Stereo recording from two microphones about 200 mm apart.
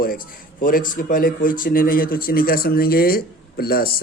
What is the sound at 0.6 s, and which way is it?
A man's voice, 45° left (ahead or behind).